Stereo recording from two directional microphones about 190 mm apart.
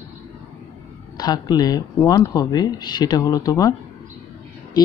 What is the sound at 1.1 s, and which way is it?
Speech, 20° left (ahead or behind).